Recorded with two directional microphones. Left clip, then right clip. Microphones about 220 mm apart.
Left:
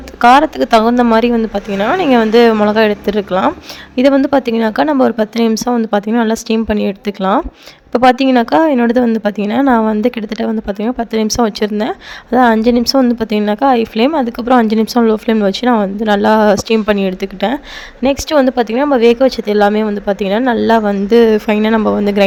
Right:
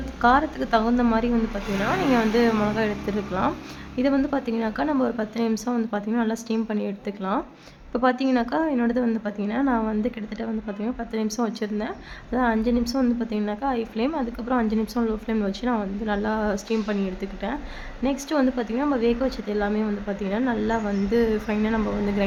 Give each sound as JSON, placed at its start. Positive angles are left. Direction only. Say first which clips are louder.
{"t": 0.2, "sound": "a woman's voice", "louder": "left 12 dB", "side_deg": 40}